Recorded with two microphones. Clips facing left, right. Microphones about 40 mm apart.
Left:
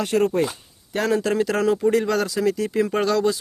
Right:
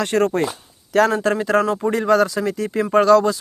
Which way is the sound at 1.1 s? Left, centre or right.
Right.